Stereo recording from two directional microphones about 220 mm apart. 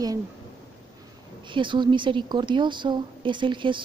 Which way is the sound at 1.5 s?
20° right (ahead or behind).